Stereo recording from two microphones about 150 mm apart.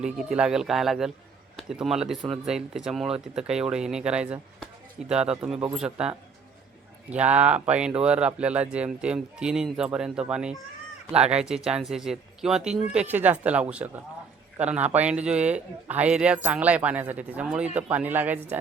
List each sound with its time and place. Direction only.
0.0 s a man's voice: 5° right (ahead or behind)
11.1 s speech: 45° right (ahead or behind)
11.3 s a man's voice: 5° right (ahead or behind)